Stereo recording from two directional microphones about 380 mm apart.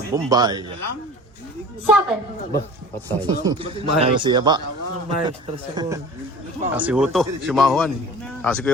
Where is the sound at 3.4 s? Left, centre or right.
Centre.